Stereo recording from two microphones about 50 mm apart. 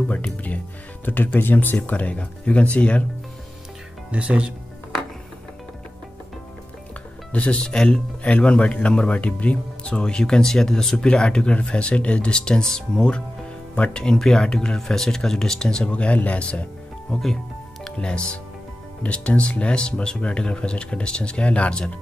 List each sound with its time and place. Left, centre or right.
0.1 s speech: left
1.8 s speech: left
4.1 s speech: right
7.3 s speech: left
15.9 s speech: left
17.1 s speech: centre
17.9 s speech: centre